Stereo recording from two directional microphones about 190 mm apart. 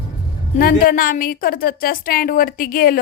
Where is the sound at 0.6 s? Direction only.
50° left (ahead or behind).